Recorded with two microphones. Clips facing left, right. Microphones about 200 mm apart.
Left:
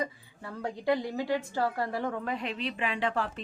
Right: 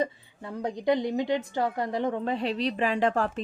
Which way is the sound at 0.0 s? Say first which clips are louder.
Right 5 dB; 20° right (ahead or behind).